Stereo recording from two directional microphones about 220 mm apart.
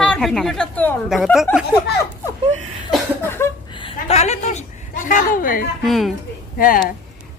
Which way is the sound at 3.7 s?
25° left (ahead or behind).